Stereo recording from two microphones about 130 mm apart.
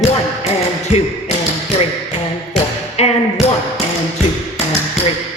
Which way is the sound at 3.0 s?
55° left (ahead or behind).